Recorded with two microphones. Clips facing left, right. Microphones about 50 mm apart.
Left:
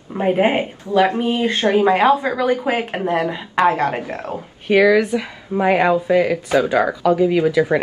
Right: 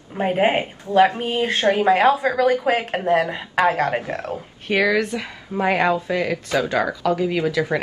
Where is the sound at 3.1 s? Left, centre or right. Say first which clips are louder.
Even; right.